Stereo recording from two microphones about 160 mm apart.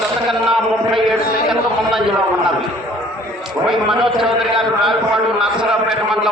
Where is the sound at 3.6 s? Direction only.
Centre (ahead or behind).